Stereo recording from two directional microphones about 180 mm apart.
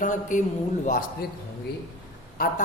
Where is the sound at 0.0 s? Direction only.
45° left (ahead or behind).